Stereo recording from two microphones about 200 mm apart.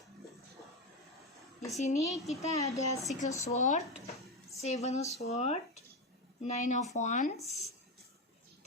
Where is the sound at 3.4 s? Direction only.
35° left (ahead or behind).